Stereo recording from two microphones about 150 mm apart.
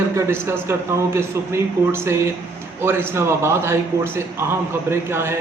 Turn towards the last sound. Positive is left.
turn(degrees=-15)  # may be behind; listen again after turning